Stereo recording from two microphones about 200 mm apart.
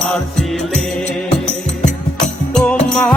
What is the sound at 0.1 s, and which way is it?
Music, 5° left (ahead or behind).